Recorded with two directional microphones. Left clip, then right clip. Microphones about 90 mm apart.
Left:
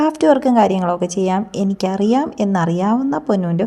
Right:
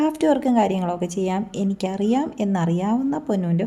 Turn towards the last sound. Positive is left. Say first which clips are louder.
# left 6 dB
turn(degrees=25)  # may be behind; listen again after turning